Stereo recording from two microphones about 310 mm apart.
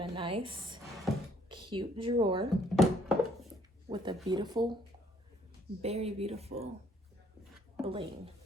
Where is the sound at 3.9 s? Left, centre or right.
Centre.